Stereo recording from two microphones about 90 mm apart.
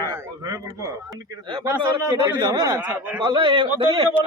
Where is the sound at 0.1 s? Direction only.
40° right (ahead or behind).